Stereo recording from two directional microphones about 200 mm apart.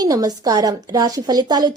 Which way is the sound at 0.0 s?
20° right (ahead or behind).